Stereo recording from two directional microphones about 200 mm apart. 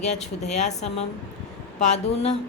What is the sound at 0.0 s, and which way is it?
A woman's voice, 35° left (ahead or behind).